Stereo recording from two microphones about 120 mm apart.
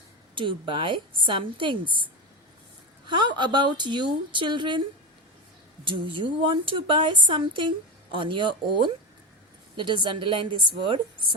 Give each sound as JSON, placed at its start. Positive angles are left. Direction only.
{"t": 0.3, "sound": "a woman's voice", "side_deg": -45}
{"t": 3.1, "sound": "a woman's voice", "side_deg": -40}
{"t": 5.8, "sound": "a woman's voice", "side_deg": -45}